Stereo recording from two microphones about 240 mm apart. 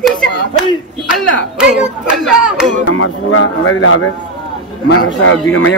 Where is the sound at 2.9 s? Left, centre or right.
Left.